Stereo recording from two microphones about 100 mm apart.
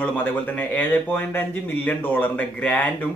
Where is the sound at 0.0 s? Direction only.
20° left (ahead or behind).